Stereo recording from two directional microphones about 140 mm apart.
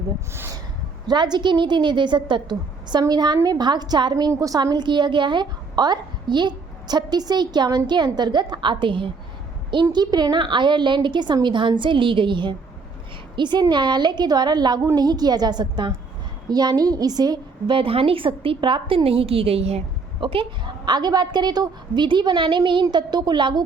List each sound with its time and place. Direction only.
0.3 s speech: 20° right (ahead or behind)
1.0 s a woman's voice: 30° right (ahead or behind)